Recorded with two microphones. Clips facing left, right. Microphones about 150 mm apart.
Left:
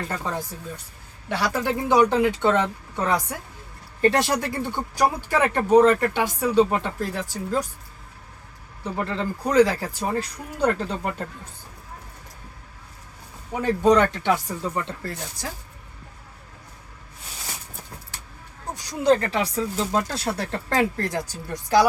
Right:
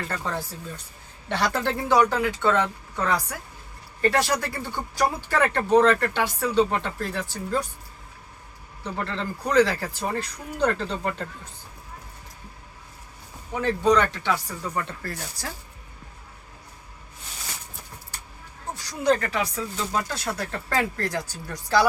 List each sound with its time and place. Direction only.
0.1 s speech: 15° left (ahead or behind)
8.8 s speech: 10° left (ahead or behind)
13.5 s speech: 10° left (ahead or behind)
14.3 s speech: 20° left (ahead or behind)
19.0 s speech: 25° left (ahead or behind)